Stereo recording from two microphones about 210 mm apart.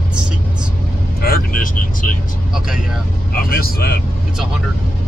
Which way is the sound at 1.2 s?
45° left (ahead or behind).